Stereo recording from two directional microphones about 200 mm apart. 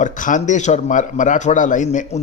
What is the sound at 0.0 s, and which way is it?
A man's voice, 40° left (ahead or behind).